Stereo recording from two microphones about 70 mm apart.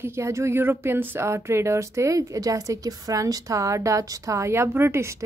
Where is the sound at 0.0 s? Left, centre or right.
Right.